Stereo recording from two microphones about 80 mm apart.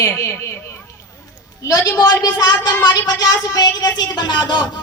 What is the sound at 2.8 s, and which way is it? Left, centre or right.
Speech, left.